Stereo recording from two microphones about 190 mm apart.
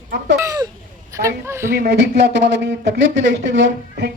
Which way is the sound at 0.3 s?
20° right (ahead or behind).